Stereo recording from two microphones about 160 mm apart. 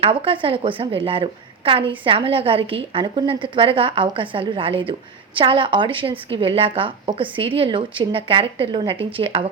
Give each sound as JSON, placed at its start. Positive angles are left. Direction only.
{"t": 0.0, "sound": "a woman's voice", "side_deg": -35}